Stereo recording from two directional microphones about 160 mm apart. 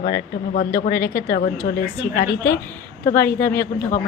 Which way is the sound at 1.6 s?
60° left (ahead or behind).